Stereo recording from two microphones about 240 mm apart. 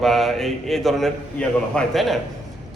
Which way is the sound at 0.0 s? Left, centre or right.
Centre.